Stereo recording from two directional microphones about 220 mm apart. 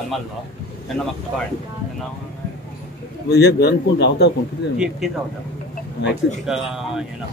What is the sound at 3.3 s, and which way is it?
A man's voice, 50° left (ahead or behind).